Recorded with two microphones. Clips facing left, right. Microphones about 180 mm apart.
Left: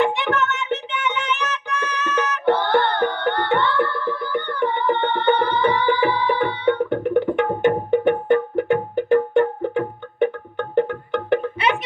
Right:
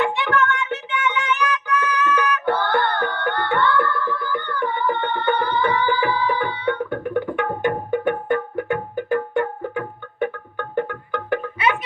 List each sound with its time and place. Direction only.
0.0 s music: 20° left (ahead or behind)